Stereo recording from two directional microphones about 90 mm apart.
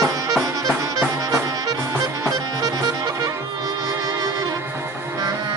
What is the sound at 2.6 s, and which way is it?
Music, 45° right (ahead or behind).